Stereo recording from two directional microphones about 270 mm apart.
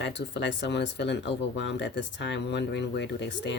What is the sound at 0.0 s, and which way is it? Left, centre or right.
Speech, left.